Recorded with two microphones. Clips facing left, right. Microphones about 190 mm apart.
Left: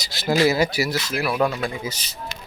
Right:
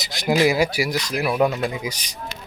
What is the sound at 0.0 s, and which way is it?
Speech, 15° right (ahead or behind).